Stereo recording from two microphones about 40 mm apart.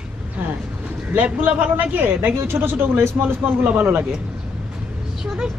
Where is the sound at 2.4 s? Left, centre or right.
Right.